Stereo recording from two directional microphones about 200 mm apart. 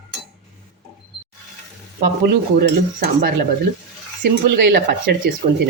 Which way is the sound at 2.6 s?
45° right (ahead or behind).